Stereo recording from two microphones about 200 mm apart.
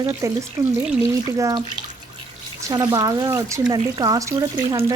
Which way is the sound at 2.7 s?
20° right (ahead or behind).